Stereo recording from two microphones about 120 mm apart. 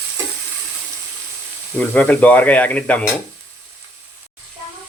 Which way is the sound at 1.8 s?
10° left (ahead or behind).